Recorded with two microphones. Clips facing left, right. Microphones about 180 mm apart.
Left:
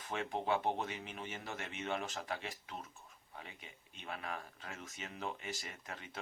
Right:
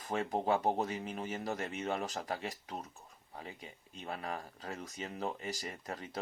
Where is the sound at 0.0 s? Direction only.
40° right (ahead or behind).